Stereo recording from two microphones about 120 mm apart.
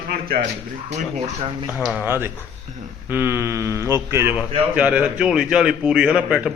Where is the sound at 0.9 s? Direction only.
55° right (ahead or behind).